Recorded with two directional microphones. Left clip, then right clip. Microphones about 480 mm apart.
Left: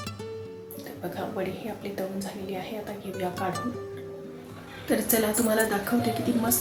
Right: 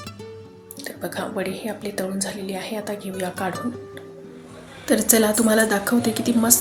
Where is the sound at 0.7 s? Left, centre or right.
Centre.